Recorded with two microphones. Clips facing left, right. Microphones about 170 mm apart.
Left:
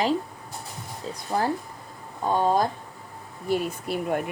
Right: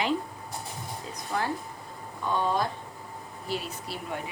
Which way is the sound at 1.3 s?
35° left (ahead or behind).